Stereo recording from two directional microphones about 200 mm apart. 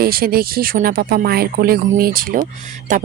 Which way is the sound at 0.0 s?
45° right (ahead or behind).